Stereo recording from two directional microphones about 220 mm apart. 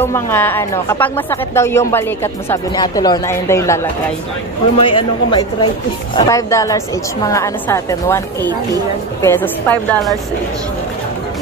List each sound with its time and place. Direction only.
0.0 s speech: 10° left (ahead or behind)
4.7 s speech: 25° left (ahead or behind)
9.2 s speech: 10° left (ahead or behind)